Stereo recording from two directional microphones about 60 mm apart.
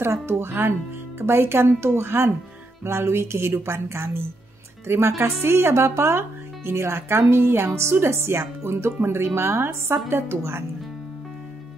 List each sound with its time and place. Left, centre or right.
0.0 s speech: right